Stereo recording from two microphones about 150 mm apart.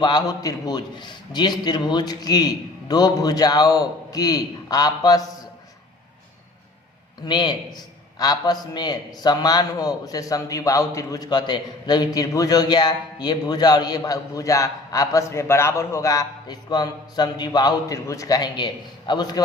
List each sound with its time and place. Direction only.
0.0 s a man's voice: 30° left (ahead or behind)
7.3 s a man's voice: 30° left (ahead or behind)